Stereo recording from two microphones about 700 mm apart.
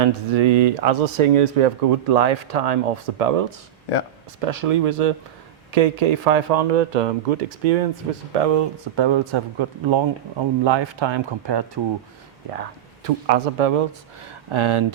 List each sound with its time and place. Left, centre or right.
0.0 s speech: right
8.3 s speech: right
13.1 s a man's voice: right
14.5 s speech: right